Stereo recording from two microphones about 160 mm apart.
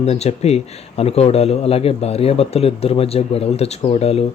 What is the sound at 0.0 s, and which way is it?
Speech, 40° left (ahead or behind).